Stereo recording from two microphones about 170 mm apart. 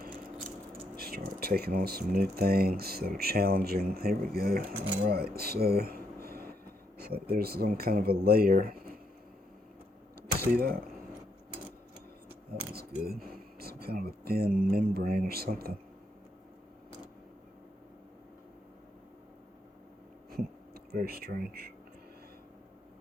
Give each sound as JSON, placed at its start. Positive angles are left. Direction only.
{"t": 0.9, "sound": "speech", "side_deg": -65}
{"t": 6.2, "sound": "train", "side_deg": -65}
{"t": 7.0, "sound": "speech", "side_deg": -65}
{"t": 10.5, "sound": "speech", "side_deg": -60}
{"t": 12.5, "sound": "speech", "side_deg": -65}
{"t": 20.3, "sound": "a sound", "side_deg": -65}